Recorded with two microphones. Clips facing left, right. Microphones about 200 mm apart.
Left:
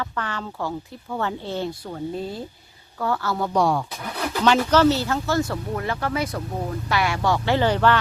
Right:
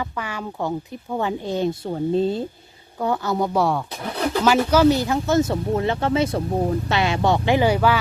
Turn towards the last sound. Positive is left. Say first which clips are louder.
# right 1 dB
turn(degrees=-10)  # may be behind; listen again after turning